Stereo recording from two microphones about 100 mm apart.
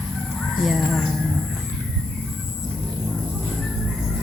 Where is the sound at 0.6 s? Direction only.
5° left (ahead or behind).